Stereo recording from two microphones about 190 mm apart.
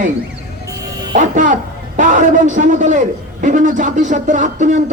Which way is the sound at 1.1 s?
40° right (ahead or behind).